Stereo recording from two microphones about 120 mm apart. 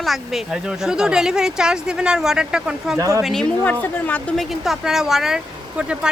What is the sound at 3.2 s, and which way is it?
A woman's voice, 5° left (ahead or behind).